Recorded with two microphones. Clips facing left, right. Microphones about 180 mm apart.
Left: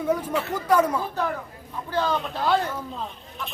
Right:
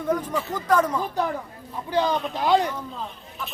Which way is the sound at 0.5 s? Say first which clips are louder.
Left 1 dB; 10° left (ahead or behind).